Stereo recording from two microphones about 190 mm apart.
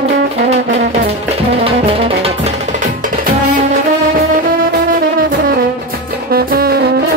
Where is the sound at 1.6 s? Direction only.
30° right (ahead or behind).